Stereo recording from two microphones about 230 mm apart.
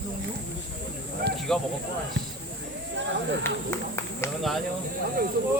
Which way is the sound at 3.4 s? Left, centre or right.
Centre.